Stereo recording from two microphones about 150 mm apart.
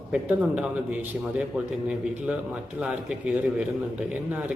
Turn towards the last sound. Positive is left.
turn(degrees=-5)  # may be behind; listen again after turning